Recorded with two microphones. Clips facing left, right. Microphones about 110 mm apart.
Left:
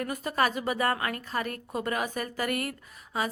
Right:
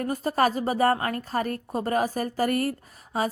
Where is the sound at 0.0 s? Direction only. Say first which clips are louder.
Right 4 dB; 35° right (ahead or behind).